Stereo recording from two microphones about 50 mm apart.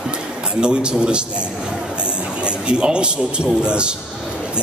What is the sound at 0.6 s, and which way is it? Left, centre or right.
A man's voice, centre.